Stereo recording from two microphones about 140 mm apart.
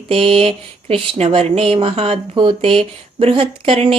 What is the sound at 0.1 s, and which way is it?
Speech, 40° right (ahead or behind).